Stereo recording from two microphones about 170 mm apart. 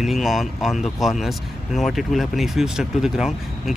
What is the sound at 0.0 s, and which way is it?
Speech, centre (ahead or behind).